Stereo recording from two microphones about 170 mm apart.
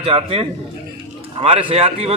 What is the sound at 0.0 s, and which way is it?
A man's voice, 35° right (ahead or behind).